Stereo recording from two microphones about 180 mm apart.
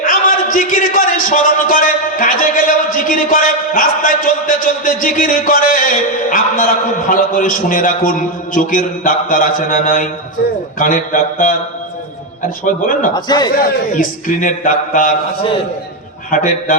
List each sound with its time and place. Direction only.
0.0 s a man's voice: 50° left (ahead or behind)
12.6 s a man's voice: 50° left (ahead or behind)
13.1 s a man's voice: 25° left (ahead or behind)
13.9 s a man's voice: 50° left (ahead or behind)
16.3 s a man's voice: 50° left (ahead or behind)